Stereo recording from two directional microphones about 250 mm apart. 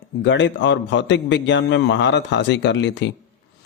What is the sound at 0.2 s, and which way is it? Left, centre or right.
Speech, left.